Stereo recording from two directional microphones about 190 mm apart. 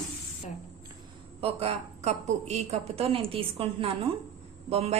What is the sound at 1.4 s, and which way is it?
A woman's voice, 35° right (ahead or behind).